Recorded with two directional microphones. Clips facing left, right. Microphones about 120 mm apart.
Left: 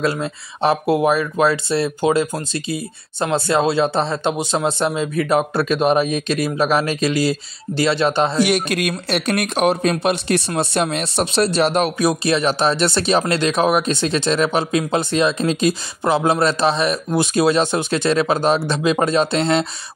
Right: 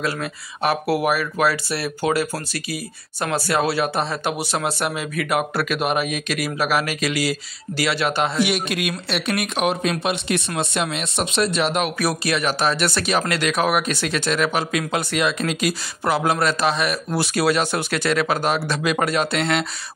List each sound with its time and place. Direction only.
0.0 s speech: 25° left (ahead or behind)
8.4 s speech: 45° left (ahead or behind)
12.0 s speech: 25° left (ahead or behind)